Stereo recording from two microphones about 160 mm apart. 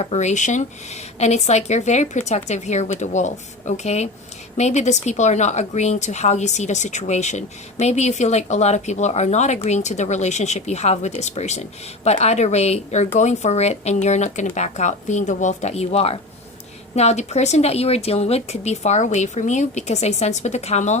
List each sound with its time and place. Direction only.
0.0 s a woman's voice: 45° left (ahead or behind)